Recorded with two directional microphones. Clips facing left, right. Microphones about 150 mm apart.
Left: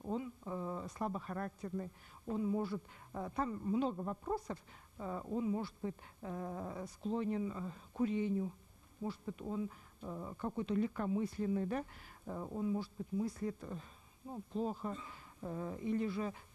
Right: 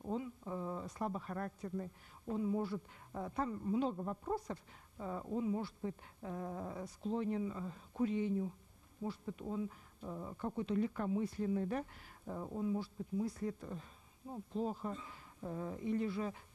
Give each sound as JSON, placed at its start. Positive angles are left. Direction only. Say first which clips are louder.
{"t": 0.0, "sound": "speech", "louder": "even", "side_deg": -30}
{"t": 9.0, "sound": "speech", "louder": "even", "side_deg": -30}